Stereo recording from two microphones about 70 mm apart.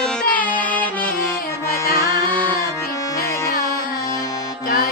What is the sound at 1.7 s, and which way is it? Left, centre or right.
Music, left.